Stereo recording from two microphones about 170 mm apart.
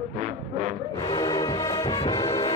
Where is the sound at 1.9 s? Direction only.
35° left (ahead or behind).